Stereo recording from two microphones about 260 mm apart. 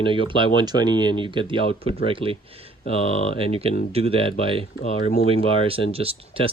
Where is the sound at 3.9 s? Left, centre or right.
Right.